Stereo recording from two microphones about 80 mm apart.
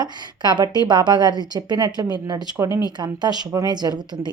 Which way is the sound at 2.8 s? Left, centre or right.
Right.